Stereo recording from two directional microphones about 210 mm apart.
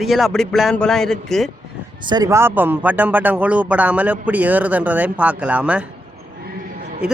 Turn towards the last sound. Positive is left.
turn(degrees=-5)  # may be behind; listen again after turning